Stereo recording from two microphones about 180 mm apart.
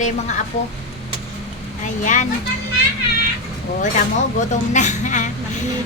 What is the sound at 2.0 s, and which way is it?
Speech, 45° left (ahead or behind).